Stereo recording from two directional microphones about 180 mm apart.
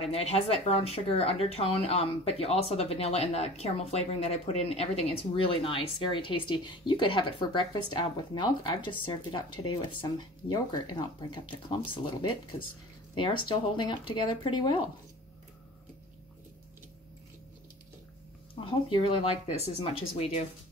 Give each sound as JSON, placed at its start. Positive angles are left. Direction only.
{"t": 0.0, "sound": "speech", "side_deg": 35}
{"t": 18.5, "sound": "speech", "side_deg": 30}